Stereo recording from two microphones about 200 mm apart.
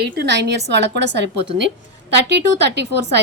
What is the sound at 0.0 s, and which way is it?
A woman's voice, 55° right (ahead or behind).